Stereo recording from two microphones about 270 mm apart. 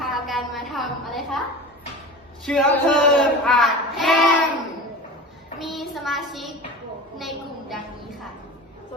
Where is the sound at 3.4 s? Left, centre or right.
Centre.